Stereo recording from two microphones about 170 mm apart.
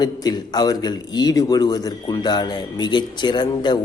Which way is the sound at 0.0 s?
25° left (ahead or behind).